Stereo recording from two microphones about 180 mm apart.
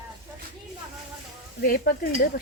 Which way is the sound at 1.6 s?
55° left (ahead or behind).